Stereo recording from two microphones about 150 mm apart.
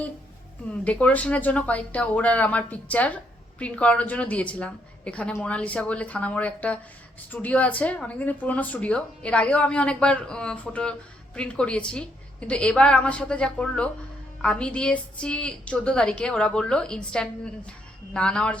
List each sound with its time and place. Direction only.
0.7 s speech: 10° left (ahead or behind)